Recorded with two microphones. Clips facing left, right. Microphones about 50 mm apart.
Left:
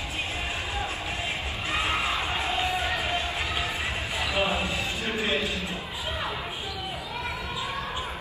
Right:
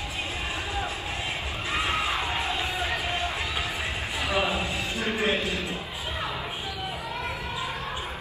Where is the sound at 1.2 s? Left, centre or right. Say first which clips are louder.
Even; left.